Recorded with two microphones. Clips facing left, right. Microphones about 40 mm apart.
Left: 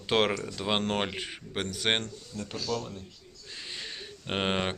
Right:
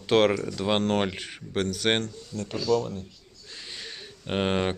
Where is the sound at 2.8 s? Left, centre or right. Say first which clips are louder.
Right 7 dB; centre.